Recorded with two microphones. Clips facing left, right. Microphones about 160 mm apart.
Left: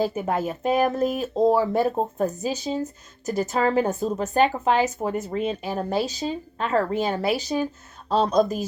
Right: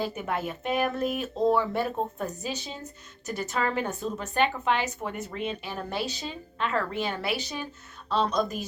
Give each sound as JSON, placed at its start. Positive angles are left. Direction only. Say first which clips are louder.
{"t": 0.0, "sound": "speech", "louder": "left 6 dB", "side_deg": 35}